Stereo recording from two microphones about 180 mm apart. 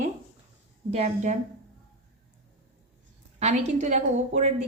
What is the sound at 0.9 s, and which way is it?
Speech, 35° right (ahead or behind).